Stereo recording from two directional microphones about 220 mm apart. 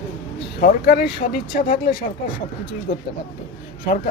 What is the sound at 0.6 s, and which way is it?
Speech, 45° left (ahead or behind).